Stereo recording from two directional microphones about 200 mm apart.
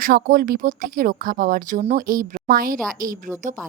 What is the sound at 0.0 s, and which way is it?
Speech, 45° right (ahead or behind).